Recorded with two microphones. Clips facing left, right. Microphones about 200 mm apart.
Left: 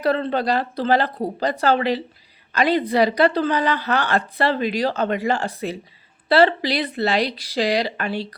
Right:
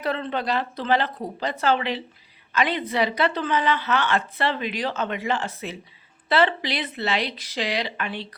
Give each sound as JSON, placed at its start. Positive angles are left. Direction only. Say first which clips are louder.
{"t": 0.0, "sound": "a woman's voice", "louder": "left 6 dB", "side_deg": 35}